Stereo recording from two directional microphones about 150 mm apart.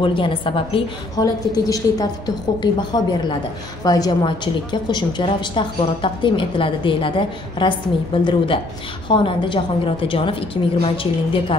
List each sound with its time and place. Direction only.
0.0 s a woman's voice: 35° left (ahead or behind)